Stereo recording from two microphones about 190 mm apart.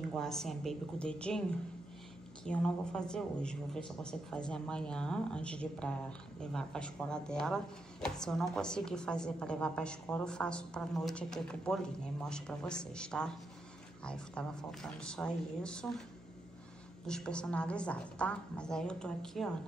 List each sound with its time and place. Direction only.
0.2 s a woman's voice: centre (ahead or behind)
2.4 s a woman's voice: 5° left (ahead or behind)
17.0 s a woman's voice: 5° left (ahead or behind)